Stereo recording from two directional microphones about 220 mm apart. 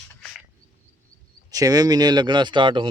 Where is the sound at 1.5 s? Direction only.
15° right (ahead or behind).